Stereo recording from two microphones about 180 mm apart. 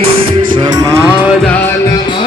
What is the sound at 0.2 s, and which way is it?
Music, 25° right (ahead or behind).